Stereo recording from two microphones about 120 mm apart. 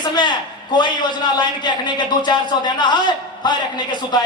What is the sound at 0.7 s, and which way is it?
A man's voice, 40° left (ahead or behind).